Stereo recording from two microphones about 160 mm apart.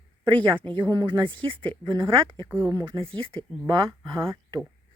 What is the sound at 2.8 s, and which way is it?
Speech, 35° right (ahead or behind).